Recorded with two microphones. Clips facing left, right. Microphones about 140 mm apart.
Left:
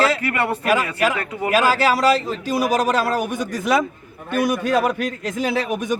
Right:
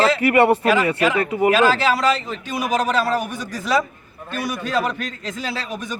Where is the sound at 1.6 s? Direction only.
10° left (ahead or behind).